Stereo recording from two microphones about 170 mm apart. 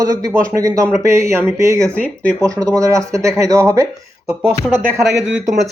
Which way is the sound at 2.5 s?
20° right (ahead or behind).